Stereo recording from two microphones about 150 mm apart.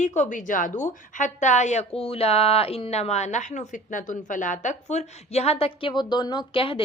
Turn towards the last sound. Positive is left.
turn(degrees=35)  # may be behind; listen again after turning